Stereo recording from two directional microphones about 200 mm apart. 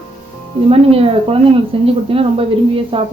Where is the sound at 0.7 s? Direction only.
30° right (ahead or behind).